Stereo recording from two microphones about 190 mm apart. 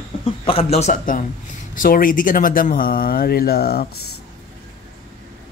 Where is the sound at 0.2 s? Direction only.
30° left (ahead or behind); by 3.8 s 55° left (ahead or behind).